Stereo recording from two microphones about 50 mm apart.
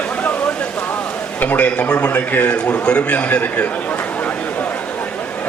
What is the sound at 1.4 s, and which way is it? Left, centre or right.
A man's voice, left.